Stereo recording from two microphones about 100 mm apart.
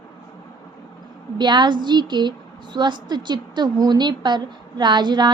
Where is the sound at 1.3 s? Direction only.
50° right (ahead or behind).